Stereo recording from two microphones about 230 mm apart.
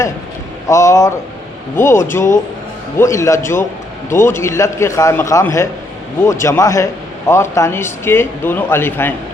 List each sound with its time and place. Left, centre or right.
0.7 s a man's voice: centre